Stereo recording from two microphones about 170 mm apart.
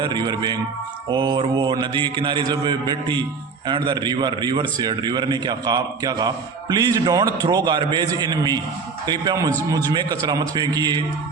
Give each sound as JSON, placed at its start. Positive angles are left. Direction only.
{"t": 0.0, "sound": "a man's voice", "side_deg": -25}